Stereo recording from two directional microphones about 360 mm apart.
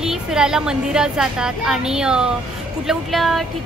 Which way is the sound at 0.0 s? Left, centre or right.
Centre.